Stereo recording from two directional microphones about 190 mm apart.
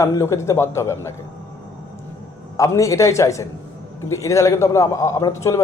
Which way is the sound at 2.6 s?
15° left (ahead or behind).